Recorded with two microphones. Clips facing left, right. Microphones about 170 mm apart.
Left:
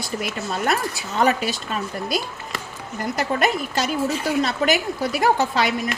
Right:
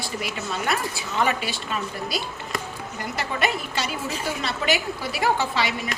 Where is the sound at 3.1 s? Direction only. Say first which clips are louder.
Left 4 dB; 45° left (ahead or behind).